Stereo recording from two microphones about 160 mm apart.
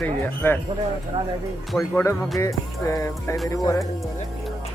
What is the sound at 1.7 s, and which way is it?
Speech, 5° left (ahead or behind).